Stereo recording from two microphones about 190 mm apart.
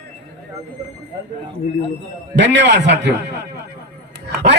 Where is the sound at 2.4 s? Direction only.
70° right (ahead or behind).